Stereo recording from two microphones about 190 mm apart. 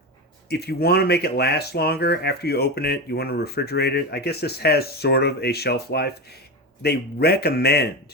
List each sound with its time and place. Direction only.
0.4 s speech: 60° left (ahead or behind)